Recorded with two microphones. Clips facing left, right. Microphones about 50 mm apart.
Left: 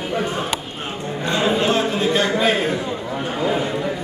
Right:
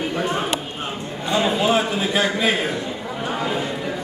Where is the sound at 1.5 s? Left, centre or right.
Centre.